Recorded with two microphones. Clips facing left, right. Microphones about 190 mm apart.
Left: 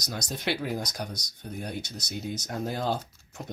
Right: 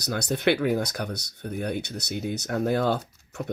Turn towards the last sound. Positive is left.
turn(degrees=-60)  # may be behind; listen again after turning